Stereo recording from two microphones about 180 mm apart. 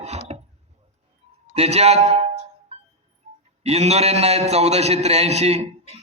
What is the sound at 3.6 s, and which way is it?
A man's voice, 35° right (ahead or behind).